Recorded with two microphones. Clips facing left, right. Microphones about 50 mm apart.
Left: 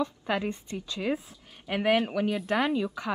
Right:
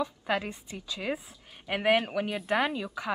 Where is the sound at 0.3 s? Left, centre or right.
Centre.